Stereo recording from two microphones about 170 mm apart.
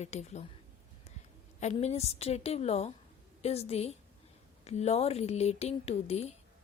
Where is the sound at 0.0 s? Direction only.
40° left (ahead or behind).